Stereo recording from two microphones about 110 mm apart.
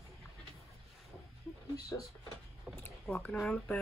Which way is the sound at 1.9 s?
25° left (ahead or behind).